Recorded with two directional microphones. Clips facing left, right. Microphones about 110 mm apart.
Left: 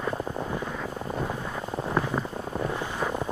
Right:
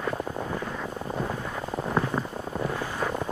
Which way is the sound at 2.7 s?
20° left (ahead or behind).